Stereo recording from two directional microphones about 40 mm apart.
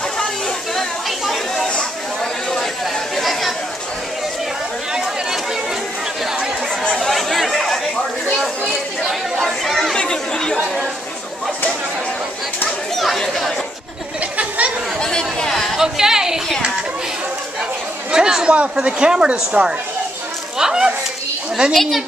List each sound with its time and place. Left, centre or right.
0.7 s chatter: centre
4.9 s chatter: centre
6.7 s a sound: centre
7.0 s chatter: centre
9.4 s chatter: centre
9.9 s chatter: centre
12.6 s chatter: centre
14.3 s a sound: right
15.0 s chatter: centre
15.8 s a sound: centre
18.1 s chatter: centre
18.8 s a woman's voice: right
20.5 s a sound: centre
21.6 s a woman's voice: right